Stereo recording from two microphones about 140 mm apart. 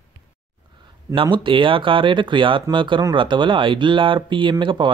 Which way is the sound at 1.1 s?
40° right (ahead or behind).